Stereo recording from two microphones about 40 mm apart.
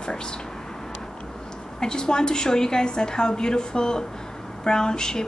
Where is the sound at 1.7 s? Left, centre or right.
Centre.